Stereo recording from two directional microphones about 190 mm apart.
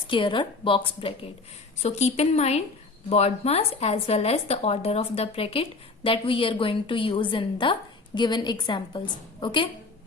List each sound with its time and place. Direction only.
0.1 s a woman's voice: 25° left (ahead or behind)